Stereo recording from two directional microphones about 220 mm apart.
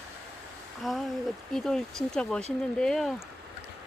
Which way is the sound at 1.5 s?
Centre (ahead or behind).